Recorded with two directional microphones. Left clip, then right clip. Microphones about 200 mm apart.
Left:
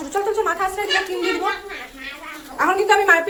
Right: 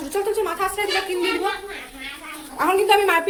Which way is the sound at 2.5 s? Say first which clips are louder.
Left 1 dB; 10° right (ahead or behind).